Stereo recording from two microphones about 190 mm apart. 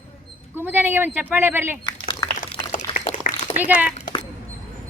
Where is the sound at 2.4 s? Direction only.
45° left (ahead or behind).